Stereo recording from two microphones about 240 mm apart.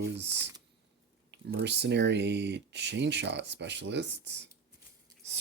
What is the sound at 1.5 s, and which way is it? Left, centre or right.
Speech, right.